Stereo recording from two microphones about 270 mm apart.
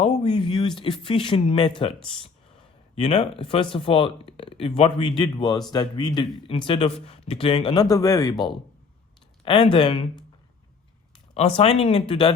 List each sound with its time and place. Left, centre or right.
0.0 s speech: left
2.9 s speech: centre
11.3 s speech: left